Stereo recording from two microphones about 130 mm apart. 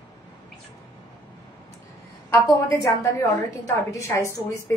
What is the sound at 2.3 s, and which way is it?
A woman's voice, 20° left (ahead or behind).